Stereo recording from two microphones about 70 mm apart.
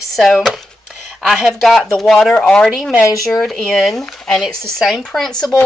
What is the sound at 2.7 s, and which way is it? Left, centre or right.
Speech, centre.